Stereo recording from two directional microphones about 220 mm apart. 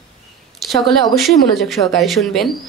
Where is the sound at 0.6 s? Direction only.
Centre (ahead or behind).